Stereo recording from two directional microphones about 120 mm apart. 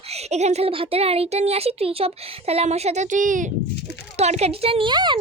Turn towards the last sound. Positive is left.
turn(degrees=-40)  # may be behind; listen again after turning